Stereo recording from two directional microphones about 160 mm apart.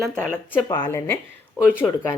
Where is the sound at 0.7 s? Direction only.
25° left (ahead or behind).